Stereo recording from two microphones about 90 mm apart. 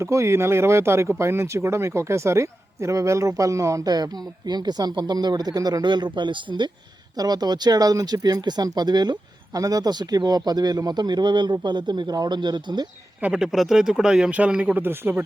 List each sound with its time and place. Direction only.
0.0 s speech: 30° right (ahead or behind); by 6.7 s 60° right (ahead or behind)
7.2 s speech: 45° right (ahead or behind)
13.2 s speech: 10° right (ahead or behind)